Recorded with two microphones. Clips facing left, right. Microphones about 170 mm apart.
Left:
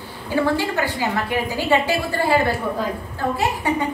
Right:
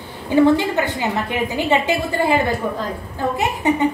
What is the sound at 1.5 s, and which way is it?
Speech, 20° right (ahead or behind).